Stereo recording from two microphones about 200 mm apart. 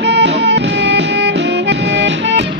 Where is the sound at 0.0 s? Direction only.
60° right (ahead or behind).